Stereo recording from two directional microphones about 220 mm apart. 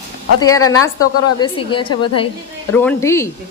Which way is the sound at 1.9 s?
90° left.